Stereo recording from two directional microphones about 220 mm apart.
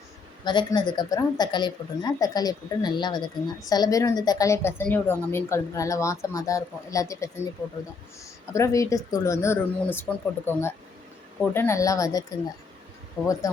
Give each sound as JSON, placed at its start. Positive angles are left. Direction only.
{"t": 0.4, "sound": "speech", "side_deg": 20}
{"t": 13.2, "sound": "speech", "side_deg": -5}